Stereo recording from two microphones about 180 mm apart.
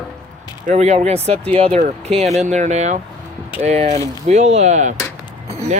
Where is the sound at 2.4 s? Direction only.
40° right (ahead or behind).